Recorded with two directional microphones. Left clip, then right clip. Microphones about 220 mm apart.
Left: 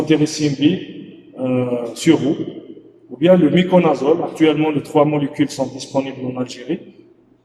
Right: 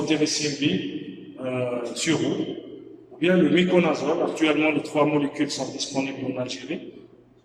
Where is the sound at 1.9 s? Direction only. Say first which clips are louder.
Left 13 dB; 30° left (ahead or behind).